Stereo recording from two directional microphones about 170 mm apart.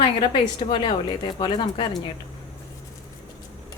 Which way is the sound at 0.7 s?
25° left (ahead or behind).